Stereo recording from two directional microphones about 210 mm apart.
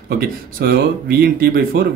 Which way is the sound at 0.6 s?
45° right (ahead or behind).